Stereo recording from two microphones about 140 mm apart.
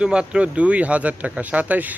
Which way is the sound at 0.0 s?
5° right (ahead or behind).